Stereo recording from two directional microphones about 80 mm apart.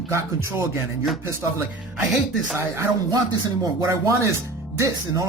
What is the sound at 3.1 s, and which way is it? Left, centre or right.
Speech, right.